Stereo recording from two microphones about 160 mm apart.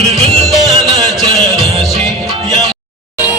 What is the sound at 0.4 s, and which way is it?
Music, centre (ahead or behind).